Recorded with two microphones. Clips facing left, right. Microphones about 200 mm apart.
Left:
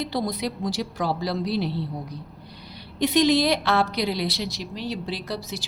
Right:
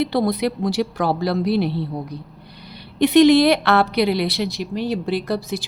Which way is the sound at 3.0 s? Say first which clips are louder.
Right 8 dB; 65° right (ahead or behind).